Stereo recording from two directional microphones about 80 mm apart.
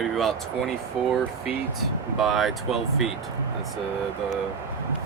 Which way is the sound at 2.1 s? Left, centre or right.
Centre.